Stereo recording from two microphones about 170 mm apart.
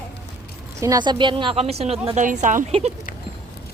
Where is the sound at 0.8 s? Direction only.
20° right (ahead or behind); by 2.9 s 40° right (ahead or behind).